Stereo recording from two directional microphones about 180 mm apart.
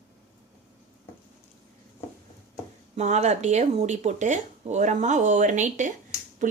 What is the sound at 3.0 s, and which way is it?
Speech, 40° right (ahead or behind).